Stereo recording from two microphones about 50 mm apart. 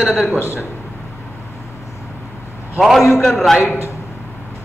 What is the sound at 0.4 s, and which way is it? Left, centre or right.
Speech, left.